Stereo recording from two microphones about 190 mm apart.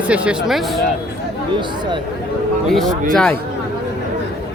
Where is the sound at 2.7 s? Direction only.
Centre (ahead or behind).